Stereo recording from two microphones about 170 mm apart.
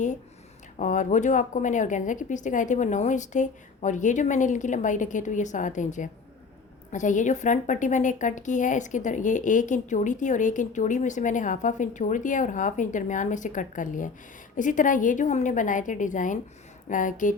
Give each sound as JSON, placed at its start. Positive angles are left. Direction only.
{"t": 0.8, "sound": "a woman's voice", "side_deg": 45}